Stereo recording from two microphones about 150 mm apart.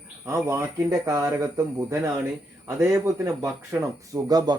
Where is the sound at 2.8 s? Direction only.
20° right (ahead or behind).